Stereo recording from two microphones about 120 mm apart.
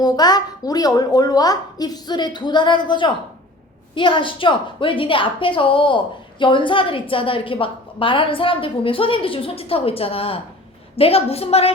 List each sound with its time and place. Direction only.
0.0 s a woman's voice: 35° left (ahead or behind); by 11.7 s 55° left (ahead or behind)